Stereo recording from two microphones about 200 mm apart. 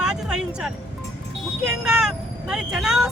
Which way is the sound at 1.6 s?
5° right (ahead or behind).